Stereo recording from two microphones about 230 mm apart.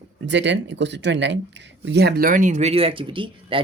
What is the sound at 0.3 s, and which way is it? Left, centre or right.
Speech, right.